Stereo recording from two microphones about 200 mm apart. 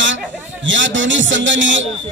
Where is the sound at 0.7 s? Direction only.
70° right (ahead or behind).